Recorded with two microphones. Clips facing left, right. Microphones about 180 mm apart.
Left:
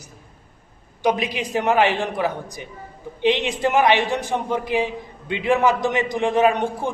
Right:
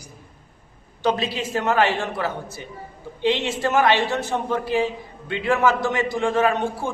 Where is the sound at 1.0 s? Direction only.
15° left (ahead or behind).